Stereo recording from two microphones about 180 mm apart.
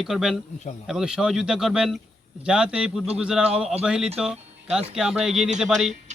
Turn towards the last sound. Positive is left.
turn(degrees=0)  # may be behind; listen again after turning